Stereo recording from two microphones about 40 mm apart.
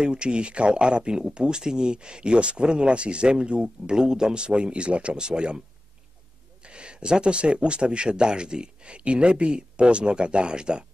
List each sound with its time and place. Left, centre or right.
0.0 s speech: right
6.6 s speech: right